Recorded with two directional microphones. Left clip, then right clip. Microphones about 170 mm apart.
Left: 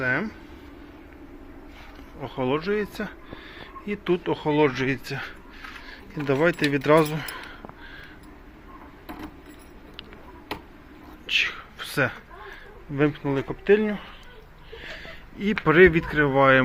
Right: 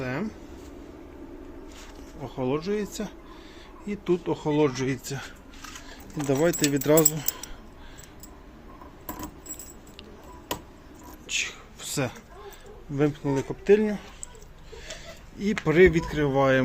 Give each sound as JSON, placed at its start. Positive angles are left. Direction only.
{"t": 0.0, "sound": "a sound", "side_deg": -10}
{"t": 2.2, "sound": "speech", "side_deg": -15}
{"t": 6.2, "sound": "speech", "side_deg": -15}
{"t": 11.3, "sound": "whispering", "side_deg": -15}
{"t": 13.0, "sound": "speech", "side_deg": -15}